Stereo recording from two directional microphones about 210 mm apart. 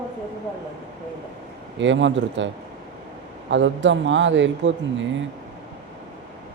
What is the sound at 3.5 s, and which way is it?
Speech, 60° right (ahead or behind).